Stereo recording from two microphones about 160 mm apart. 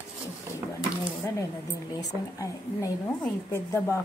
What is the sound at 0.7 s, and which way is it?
A woman's voice, 20° left (ahead or behind).